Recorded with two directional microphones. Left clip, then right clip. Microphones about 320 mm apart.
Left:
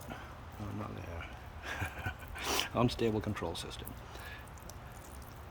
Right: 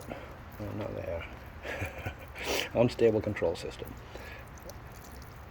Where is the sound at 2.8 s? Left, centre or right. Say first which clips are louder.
Right 7 dB; left.